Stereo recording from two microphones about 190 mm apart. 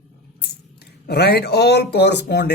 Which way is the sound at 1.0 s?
60° left (ahead or behind).